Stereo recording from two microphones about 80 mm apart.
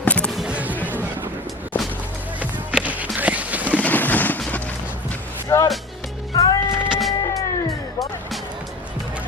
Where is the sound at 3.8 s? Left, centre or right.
Left.